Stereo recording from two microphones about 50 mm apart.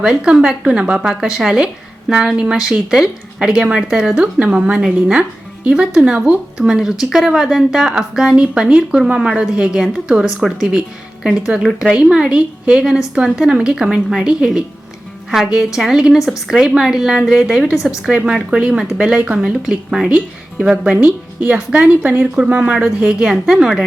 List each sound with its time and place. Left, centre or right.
0.0 s speech: centre
3.5 s speech: centre
4.1 s a woman's voice: right; by 17.4 s centre
17.8 s a woman's voice: centre
23.3 s speech: centre